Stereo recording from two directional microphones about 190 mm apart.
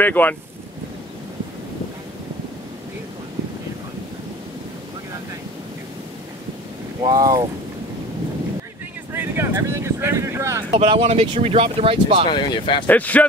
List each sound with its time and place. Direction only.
0.0 s speech: 10° left (ahead or behind)
7.0 s speech: 20° right (ahead or behind)
9.1 s speech: 10° right (ahead or behind)
10.8 s speech: 30° right (ahead or behind)
12.3 s speech: 25° left (ahead or behind)
12.8 s speech: 10° left (ahead or behind)